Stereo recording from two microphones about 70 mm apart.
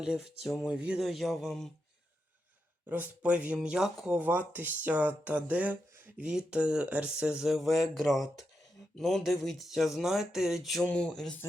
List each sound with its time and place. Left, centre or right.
0.0 s speech: centre
0.7 s speech: centre
1.0 s speech: centre
2.8 s speech: right
4.2 s speech: right; by 10.8 s centre
10.8 s speech: centre